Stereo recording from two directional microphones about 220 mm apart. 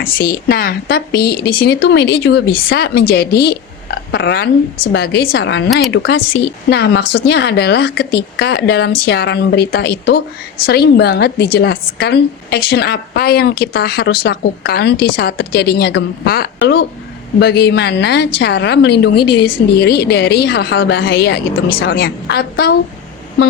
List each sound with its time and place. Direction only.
0.0 s a woman's voice: 40° left (ahead or behind); by 21.8 s 60° left (ahead or behind)
21.8 s a woman's voice: 40° left (ahead or behind)